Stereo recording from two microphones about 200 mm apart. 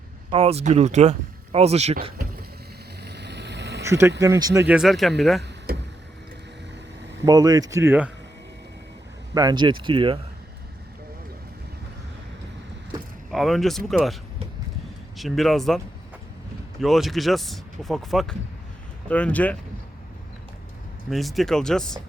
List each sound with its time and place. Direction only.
0.3 s speech: 30° right (ahead or behind)
3.0 s vehicle: 55° right (ahead or behind)
3.8 s speech: 10° right (ahead or behind)
5.7 s vehicle: 50° right (ahead or behind)
7.3 s speech: 20° right (ahead or behind)
9.3 s speech: 20° right (ahead or behind)
13.3 s speech: centre (ahead or behind)
15.2 s speech: centre (ahead or behind)
16.8 s speech: centre (ahead or behind)
21.1 s speech: centre (ahead or behind)